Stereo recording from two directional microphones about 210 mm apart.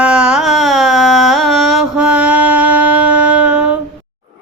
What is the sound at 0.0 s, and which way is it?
Music, 5° right (ahead or behind).